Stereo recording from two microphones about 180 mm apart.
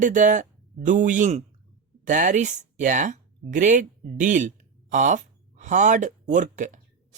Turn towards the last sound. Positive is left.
turn(degrees=-45)  # may be behind; listen again after turning